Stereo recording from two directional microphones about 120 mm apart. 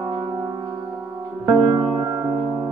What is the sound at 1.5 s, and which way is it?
Music, 30° right (ahead or behind).